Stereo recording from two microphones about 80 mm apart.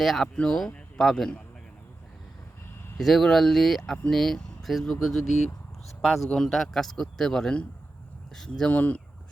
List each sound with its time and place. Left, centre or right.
0.0 s speech: centre
3.0 s speech: centre
8.7 s speech: centre